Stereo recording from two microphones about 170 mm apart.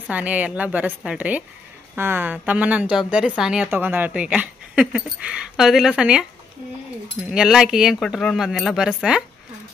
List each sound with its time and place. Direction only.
0.1 s a woman's voice: 10° right (ahead or behind)
7.2 s speech: 5° right (ahead or behind)